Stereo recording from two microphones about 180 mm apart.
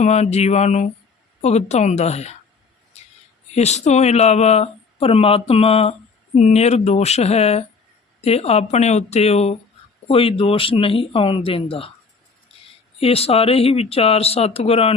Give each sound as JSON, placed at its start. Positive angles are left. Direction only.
{"t": 0.0, "sound": "speech", "side_deg": 40}
{"t": 2.9, "sound": "a sound", "side_deg": 35}
{"t": 3.5, "sound": "speech", "side_deg": 40}
{"t": 13.0, "sound": "speech", "side_deg": 35}